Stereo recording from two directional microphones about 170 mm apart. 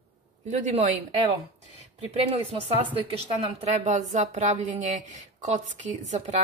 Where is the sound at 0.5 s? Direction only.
45° right (ahead or behind).